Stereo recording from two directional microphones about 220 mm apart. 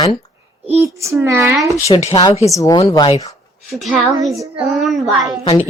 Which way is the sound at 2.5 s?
15° left (ahead or behind).